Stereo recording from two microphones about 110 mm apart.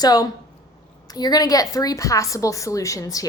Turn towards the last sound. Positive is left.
turn(degrees=30)  # may be behind; listen again after turning